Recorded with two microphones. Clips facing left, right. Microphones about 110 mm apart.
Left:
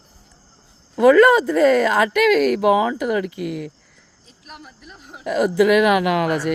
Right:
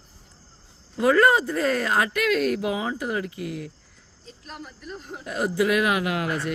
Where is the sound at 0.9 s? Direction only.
90° left.